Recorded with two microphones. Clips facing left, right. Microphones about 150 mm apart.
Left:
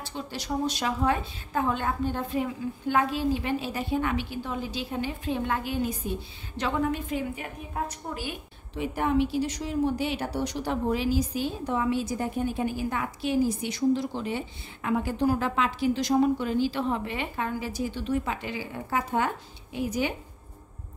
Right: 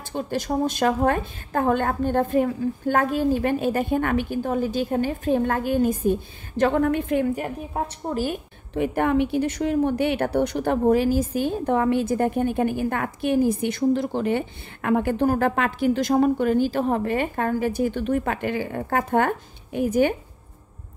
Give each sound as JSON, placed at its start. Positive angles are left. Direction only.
{"t": 0.0, "sound": "a woman's voice", "side_deg": -50}